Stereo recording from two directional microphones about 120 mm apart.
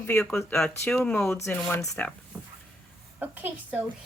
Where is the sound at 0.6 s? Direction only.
5° left (ahead or behind).